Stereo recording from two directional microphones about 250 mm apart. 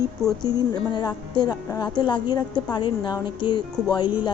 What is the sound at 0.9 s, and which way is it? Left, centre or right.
A woman's voice, centre.